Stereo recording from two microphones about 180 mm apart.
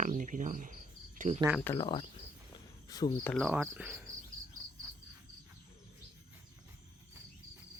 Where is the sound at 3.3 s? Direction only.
5° right (ahead or behind).